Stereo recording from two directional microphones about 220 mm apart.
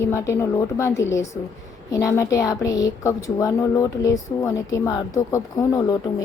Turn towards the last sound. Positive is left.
turn(degrees=15)  # may be behind; listen again after turning